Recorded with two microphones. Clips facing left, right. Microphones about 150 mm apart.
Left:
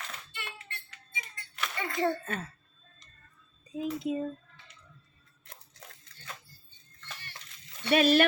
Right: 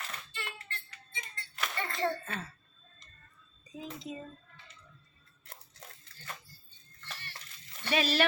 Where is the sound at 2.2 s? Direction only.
50° left (ahead or behind).